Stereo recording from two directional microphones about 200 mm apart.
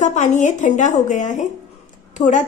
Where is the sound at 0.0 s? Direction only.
35° left (ahead or behind).